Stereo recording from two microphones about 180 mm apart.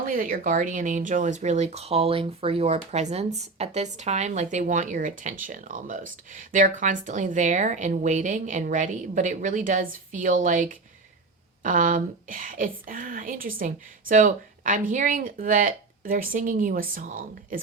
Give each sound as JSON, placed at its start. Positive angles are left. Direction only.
{"t": 0.1, "sound": "speech", "side_deg": -50}